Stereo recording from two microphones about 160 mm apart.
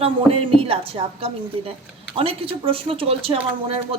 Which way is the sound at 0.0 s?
35° right (ahead or behind).